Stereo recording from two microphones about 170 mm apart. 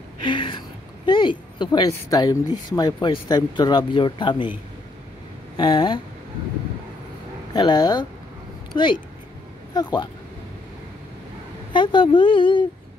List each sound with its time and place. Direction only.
0.2 s a sound: 30° left (ahead or behind)
2.7 s speech: 25° left (ahead or behind)
5.6 s speech: 30° left (ahead or behind)
7.5 s speech: 25° left (ahead or behind)
11.7 s speech: 30° left (ahead or behind)